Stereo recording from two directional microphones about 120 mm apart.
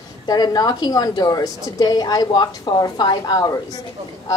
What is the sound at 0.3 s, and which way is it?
A woman's voice, 30° left (ahead or behind).